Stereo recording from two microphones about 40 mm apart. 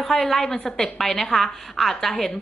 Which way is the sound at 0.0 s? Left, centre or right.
Centre.